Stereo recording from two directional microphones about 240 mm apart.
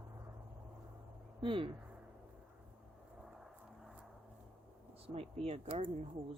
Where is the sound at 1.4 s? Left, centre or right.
Right.